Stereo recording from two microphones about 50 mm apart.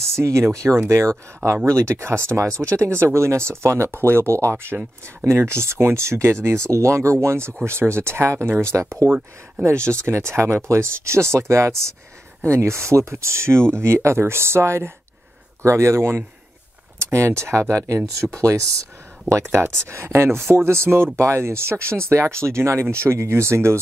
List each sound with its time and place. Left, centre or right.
0.1 s speech: right
3.0 s speech: right
5.0 s speech: right
9.9 s speech: right
15.6 s speech: right
18.2 s speech: right
19.4 s speech: right
19.9 s speech: right